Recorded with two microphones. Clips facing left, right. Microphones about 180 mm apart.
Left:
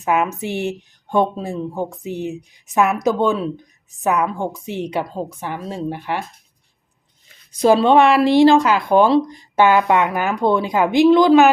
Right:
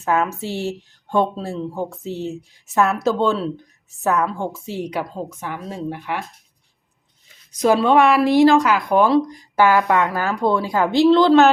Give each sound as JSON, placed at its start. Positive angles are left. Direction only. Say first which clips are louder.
{"t": 0.0, "sound": "a woman's voice", "louder": "left 1 dB", "side_deg": 15}
{"t": 7.5, "sound": "a woman's voice", "louder": "left 2 dB", "side_deg": 30}